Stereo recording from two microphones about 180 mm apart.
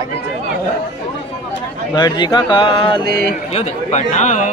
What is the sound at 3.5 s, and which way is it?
A man's voice, 40° left (ahead or behind).